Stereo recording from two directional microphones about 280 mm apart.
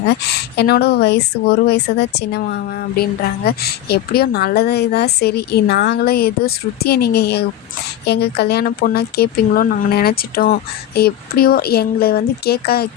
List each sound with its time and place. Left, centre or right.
0.5 s a woman's voice: left